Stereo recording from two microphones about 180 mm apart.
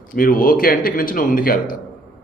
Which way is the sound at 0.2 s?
50° left (ahead or behind).